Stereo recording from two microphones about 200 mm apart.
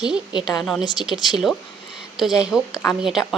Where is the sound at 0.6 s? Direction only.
Centre (ahead or behind).